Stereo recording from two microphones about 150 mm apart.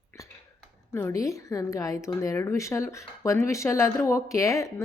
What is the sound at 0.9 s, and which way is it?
Speech, 20° left (ahead or behind).